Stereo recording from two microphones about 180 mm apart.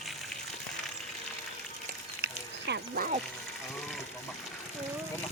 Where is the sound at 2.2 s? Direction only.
70° right (ahead or behind).